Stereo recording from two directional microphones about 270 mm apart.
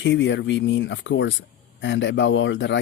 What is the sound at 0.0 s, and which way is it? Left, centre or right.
Speech, left.